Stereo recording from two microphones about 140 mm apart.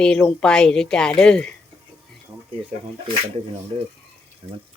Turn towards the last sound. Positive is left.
turn(degrees=-45)  # may be behind; listen again after turning